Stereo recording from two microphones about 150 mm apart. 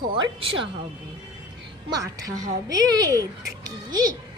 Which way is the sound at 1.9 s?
25° right (ahead or behind).